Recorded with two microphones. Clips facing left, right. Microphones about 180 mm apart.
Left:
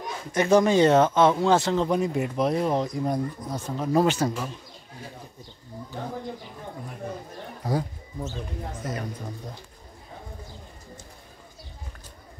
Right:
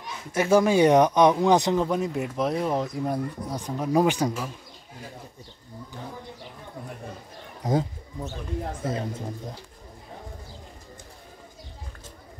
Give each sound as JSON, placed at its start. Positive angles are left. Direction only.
{"t": 0.3, "sound": "speech", "side_deg": -5}
{"t": 1.9, "sound": "speech", "side_deg": 0}
{"t": 8.8, "sound": "speech", "side_deg": -25}